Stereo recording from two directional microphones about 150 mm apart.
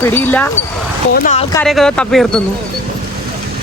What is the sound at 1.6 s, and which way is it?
Speech, centre (ahead or behind).